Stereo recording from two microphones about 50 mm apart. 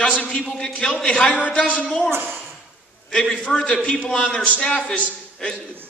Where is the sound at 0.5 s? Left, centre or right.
Centre.